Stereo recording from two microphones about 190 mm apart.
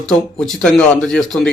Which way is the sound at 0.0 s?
Centre (ahead or behind).